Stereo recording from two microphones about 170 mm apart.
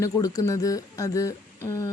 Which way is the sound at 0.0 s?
20° left (ahead or behind).